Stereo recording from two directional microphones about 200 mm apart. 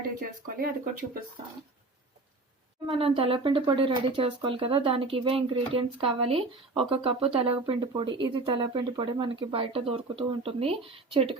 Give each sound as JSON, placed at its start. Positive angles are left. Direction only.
{"t": 0.2, "sound": "speech", "side_deg": -45}
{"t": 3.0, "sound": "speech", "side_deg": -25}